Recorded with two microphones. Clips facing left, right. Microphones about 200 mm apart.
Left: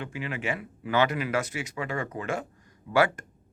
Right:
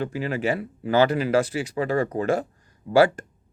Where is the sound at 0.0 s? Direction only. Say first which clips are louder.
Right 8 dB; 35° right (ahead or behind).